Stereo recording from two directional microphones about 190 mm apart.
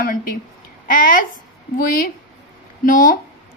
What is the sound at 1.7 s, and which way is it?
A woman's voice, 50° left (ahead or behind).